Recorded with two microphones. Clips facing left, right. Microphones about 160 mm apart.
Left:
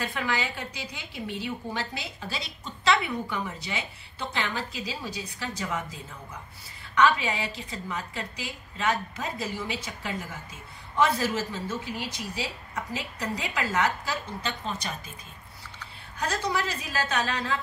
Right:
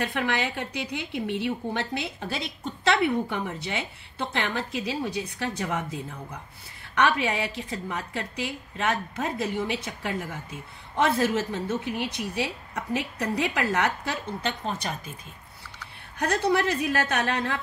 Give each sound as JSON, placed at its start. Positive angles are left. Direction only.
{"t": 0.0, "sound": "a woman's voice", "side_deg": -60}
{"t": 16.2, "sound": "a woman's voice", "side_deg": -60}